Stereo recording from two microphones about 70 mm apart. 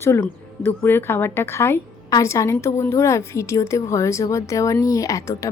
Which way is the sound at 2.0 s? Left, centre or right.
Left.